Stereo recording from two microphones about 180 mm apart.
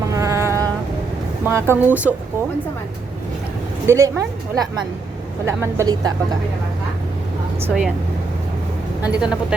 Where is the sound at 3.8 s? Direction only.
15° right (ahead or behind).